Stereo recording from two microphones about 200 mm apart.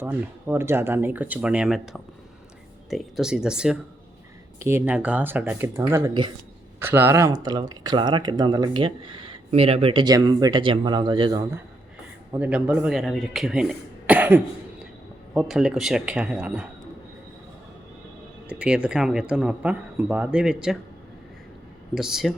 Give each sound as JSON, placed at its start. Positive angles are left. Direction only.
{"t": 0.0, "sound": "speech", "side_deg": -10}
{"t": 6.7, "sound": "speech", "side_deg": -10}
{"t": 12.3, "sound": "speech", "side_deg": -5}
{"t": 18.4, "sound": "speech", "side_deg": -5}
{"t": 21.9, "sound": "speech", "side_deg": 0}